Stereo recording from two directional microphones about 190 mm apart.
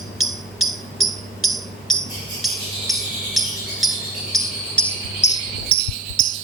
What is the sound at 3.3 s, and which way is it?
Cricket, centre (ahead or behind).